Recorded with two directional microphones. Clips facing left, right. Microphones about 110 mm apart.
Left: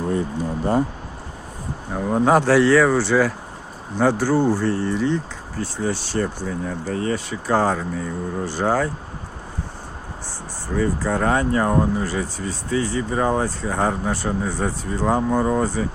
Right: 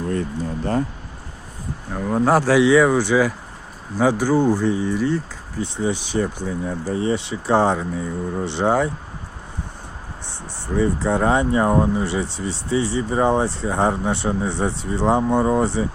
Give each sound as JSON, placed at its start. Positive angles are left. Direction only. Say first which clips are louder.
{"t": 0.1, "sound": "speech", "louder": "left 1 dB", "side_deg": 15}
{"t": 1.9, "sound": "speech", "louder": "left 1 dB", "side_deg": 10}
{"t": 5.5, "sound": "speech", "louder": "right 2 dB", "side_deg": -15}
{"t": 7.8, "sound": "speech", "louder": "right 1 dB", "side_deg": -10}
{"t": 8.4, "sound": "speech", "louder": "right 2 dB", "side_deg": -25}
{"t": 10.8, "sound": "speech", "louder": "right 2 dB", "side_deg": -25}
{"t": 12.0, "sound": "speech", "louder": "right 1 dB", "side_deg": -25}